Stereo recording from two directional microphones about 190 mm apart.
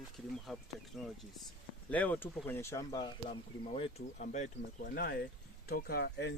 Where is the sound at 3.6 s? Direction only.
35° left (ahead or behind).